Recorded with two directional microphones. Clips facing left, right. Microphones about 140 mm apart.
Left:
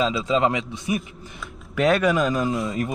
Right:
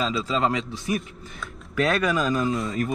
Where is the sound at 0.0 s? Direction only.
Centre (ahead or behind).